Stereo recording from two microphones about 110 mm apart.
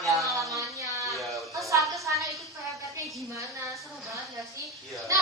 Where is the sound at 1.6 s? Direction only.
30° right (ahead or behind).